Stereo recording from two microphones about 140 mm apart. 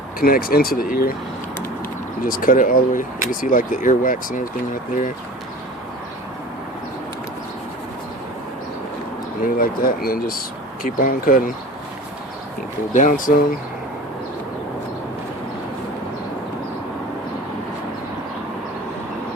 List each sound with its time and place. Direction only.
0.2 s speech: 90° left
2.2 s speech: 85° left; by 5.1 s 65° left (ahead or behind)
9.6 s speech: 90° left
12.9 s speech: 70° left (ahead or behind)